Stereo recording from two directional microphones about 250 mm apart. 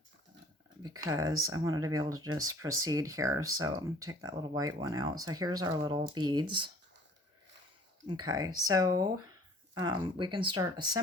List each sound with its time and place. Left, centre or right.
0.8 s speech: centre
8.0 s speech: centre